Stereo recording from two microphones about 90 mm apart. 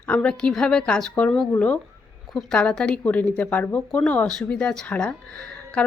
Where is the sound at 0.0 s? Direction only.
15° left (ahead or behind).